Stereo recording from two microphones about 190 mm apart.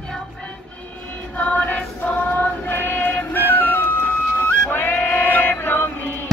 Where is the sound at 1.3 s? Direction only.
10° left (ahead or behind).